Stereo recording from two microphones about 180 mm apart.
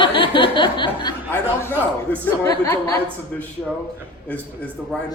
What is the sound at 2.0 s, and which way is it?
Speech, 10° left (ahead or behind).